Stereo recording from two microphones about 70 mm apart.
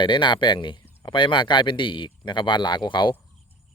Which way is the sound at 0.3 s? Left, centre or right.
Left.